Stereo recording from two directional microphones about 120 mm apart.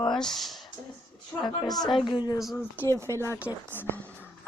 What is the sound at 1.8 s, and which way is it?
Speech, 45° left (ahead or behind).